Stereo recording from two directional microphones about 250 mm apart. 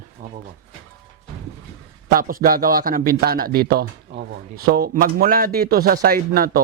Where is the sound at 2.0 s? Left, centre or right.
Right.